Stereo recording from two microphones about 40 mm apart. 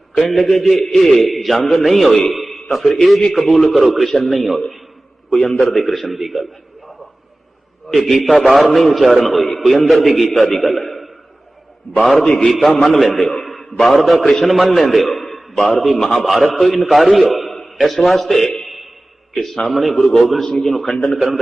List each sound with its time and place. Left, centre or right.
0.2 s a man's voice: centre
12.2 s a man's voice: left
12.5 s a man's voice: centre
16.2 s a man's voice: centre
19.6 s a man's voice: centre